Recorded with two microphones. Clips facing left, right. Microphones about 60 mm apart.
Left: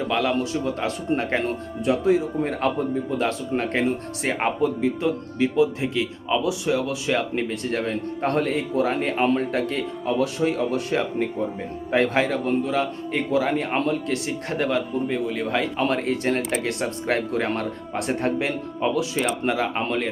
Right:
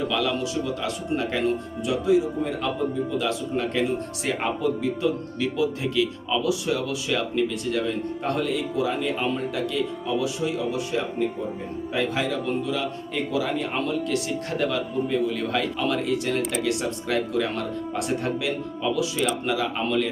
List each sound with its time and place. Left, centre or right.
0.1 s a man's voice: left
15.8 s a man's voice: left